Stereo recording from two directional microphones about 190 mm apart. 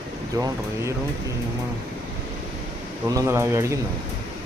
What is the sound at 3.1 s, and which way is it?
Speech, 15° right (ahead or behind).